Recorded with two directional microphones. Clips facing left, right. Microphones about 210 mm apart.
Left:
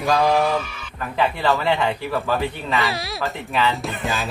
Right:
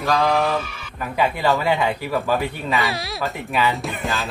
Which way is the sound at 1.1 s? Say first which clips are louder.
Right 1 dB; 10° right (ahead or behind).